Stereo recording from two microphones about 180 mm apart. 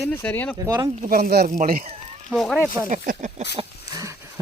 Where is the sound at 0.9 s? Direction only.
45° right (ahead or behind).